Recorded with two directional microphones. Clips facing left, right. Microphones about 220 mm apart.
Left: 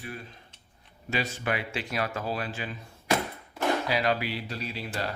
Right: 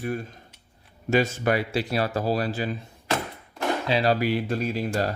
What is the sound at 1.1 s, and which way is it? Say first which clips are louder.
Speech: right 8 dB; 45° right (ahead or behind).